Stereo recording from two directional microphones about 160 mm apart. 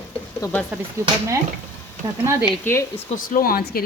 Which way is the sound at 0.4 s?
20° left (ahead or behind).